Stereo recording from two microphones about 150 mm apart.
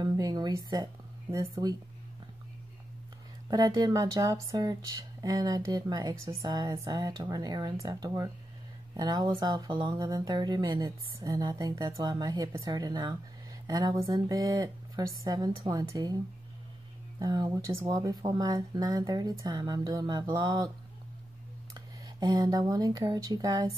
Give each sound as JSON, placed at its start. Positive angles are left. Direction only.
{"t": 0.0, "sound": "a sound", "side_deg": -30}
{"t": 1.3, "sound": "speech", "side_deg": -20}
{"t": 3.4, "sound": "speech", "side_deg": -25}
{"t": 17.2, "sound": "speech", "side_deg": -25}
{"t": 21.7, "sound": "speech", "side_deg": -25}